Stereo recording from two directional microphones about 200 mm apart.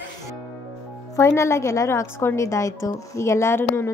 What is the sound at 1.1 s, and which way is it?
A woman's voice, 15° left (ahead or behind).